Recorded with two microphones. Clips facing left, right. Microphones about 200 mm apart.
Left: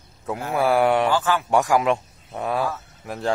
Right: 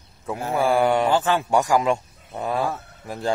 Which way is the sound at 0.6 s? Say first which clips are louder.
Left 1 dB; centre (ahead or behind).